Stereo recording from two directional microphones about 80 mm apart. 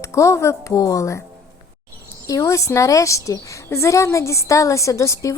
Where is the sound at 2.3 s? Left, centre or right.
Left.